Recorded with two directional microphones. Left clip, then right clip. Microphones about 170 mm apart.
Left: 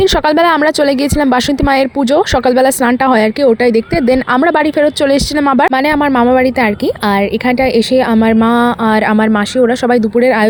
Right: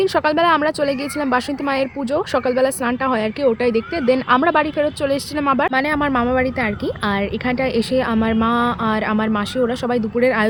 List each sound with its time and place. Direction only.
0.0 s speech: 45° left (ahead or behind)